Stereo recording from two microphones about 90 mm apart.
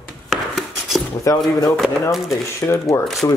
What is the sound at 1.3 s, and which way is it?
Speech, 35° left (ahead or behind).